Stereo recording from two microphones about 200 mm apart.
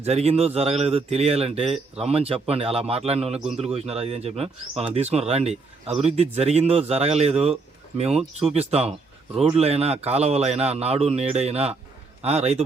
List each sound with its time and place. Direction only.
0.0 s a man's voice: 30° right (ahead or behind)